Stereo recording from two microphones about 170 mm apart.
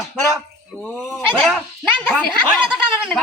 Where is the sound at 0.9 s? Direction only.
5° right (ahead or behind).